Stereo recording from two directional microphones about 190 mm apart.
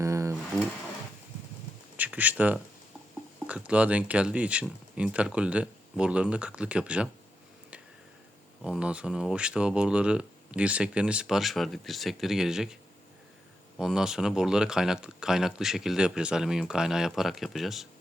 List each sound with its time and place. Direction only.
0.0 s a sound: 15° right (ahead or behind)
2.0 s speech: 10° right (ahead or behind)
8.6 s speech: 5° right (ahead or behind)
13.7 s speech: 5° right (ahead or behind)